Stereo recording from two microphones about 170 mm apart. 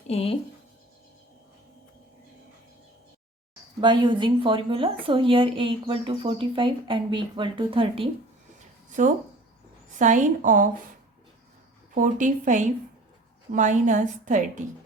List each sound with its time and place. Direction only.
0.1 s speech: 35° left (ahead or behind)
3.8 s a woman's voice: 30° right (ahead or behind)
10.0 s a woman's voice: 50° right (ahead or behind)
11.9 s a woman's voice: 50° right (ahead or behind)